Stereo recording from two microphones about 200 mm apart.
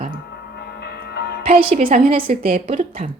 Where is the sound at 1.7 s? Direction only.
45° right (ahead or behind).